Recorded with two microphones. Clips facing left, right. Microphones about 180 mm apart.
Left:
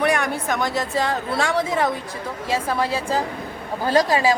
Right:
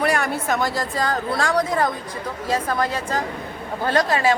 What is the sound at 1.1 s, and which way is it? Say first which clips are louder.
A woman's voice: right 1 dB; centre (ahead or behind).